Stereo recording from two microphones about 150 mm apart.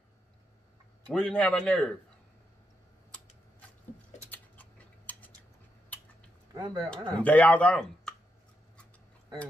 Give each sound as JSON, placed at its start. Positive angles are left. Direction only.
{"t": 1.1, "sound": "speech", "side_deg": 5}
{"t": 4.3, "sound": "cat", "side_deg": 10}
{"t": 6.5, "sound": "speech", "side_deg": -20}
{"t": 7.2, "sound": "speech", "side_deg": 10}